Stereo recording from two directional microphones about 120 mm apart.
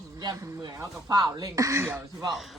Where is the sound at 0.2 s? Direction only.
30° right (ahead or behind).